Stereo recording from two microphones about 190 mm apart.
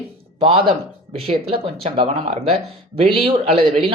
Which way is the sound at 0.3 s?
30° right (ahead or behind).